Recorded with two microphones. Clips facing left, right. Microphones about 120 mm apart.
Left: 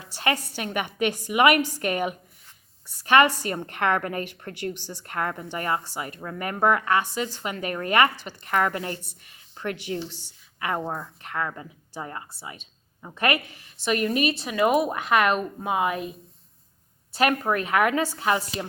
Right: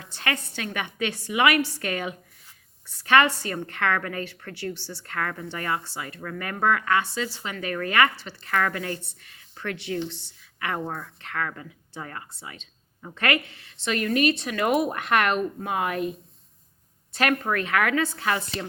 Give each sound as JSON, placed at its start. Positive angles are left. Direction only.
{"t": 0.1, "sound": "a woman's voice", "side_deg": 15}
{"t": 9.0, "sound": "speech", "side_deg": 15}
{"t": 12.3, "sound": "a woman's voice", "side_deg": 10}
{"t": 15.6, "sound": "a woman's voice", "side_deg": 15}
{"t": 17.2, "sound": "a woman's voice", "side_deg": 15}